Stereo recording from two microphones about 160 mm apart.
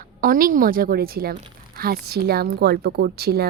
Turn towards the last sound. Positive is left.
turn(degrees=-80)